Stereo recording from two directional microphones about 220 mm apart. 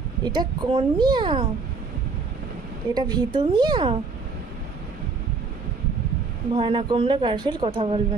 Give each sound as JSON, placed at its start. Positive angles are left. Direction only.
{"t": 0.2, "sound": "a woman's voice", "side_deg": -20}
{"t": 2.9, "sound": "a woman's voice", "side_deg": -20}
{"t": 6.5, "sound": "a woman's voice", "side_deg": -25}